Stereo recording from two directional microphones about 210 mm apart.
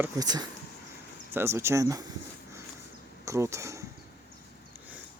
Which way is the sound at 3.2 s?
15° right (ahead or behind).